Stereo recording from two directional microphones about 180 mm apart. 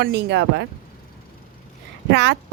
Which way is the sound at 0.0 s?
70° right (ahead or behind).